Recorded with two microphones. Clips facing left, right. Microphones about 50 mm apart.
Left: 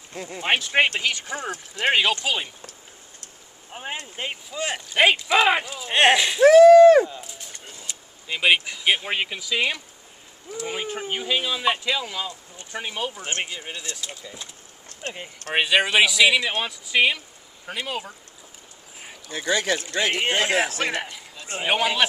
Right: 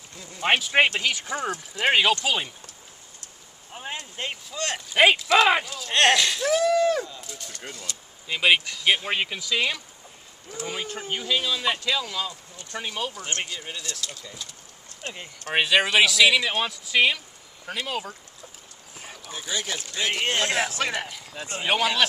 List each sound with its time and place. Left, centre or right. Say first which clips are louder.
0.4 s speech: even; centre
3.7 s speech: left 2 dB; centre
5.2 s speech: even; centre
6.4 s a sound: left 15 dB; left
7.0 s speech: left 11 dB; left
8.3 s speech: left 1 dB; centre
15.5 s speech: left 1 dB; centre
19.5 s speech: left 8 dB; left
20.2 s speech: left 1 dB; centre